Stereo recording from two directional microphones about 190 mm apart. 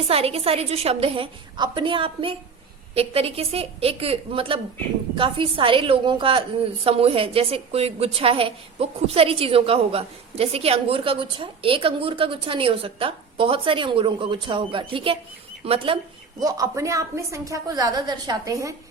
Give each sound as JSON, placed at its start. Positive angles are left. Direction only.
{"t": 0.1, "sound": "a woman's voice", "side_deg": -30}
{"t": 16.4, "sound": "a woman's voice", "side_deg": -20}